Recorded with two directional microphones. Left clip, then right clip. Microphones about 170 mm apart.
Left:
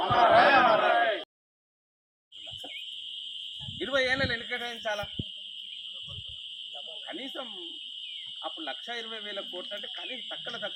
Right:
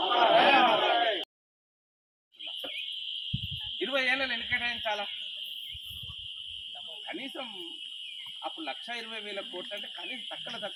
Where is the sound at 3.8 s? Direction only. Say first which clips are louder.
Left 1 dB; 15° left (ahead or behind).